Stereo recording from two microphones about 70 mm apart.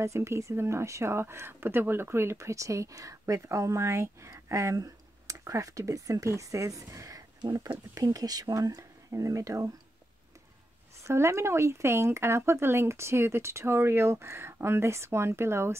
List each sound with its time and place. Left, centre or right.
0.0 s speech: right
11.0 s speech: right